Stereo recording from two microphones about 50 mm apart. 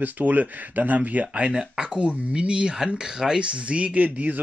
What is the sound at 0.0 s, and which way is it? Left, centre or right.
Speech, right.